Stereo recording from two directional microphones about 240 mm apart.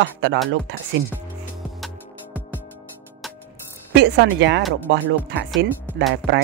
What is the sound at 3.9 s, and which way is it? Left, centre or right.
Speech, right.